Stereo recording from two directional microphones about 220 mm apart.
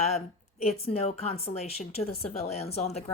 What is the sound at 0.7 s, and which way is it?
Speech, 30° left (ahead or behind).